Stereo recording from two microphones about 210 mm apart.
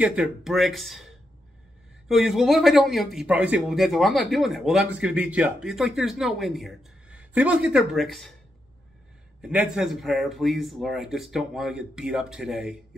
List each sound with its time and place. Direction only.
0.0 s a man's voice: 5° right (ahead or behind)
2.0 s a man's voice: centre (ahead or behind)
9.4 s a man's voice: 5° right (ahead or behind)